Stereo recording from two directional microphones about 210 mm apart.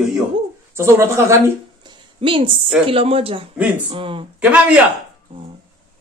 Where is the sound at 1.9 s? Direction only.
25° right (ahead or behind).